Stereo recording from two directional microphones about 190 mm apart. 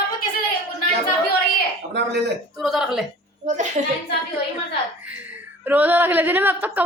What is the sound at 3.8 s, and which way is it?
Speech, 35° right (ahead or behind).